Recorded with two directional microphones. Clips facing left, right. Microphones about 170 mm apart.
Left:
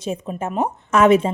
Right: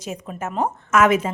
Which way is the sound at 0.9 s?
30° left (ahead or behind).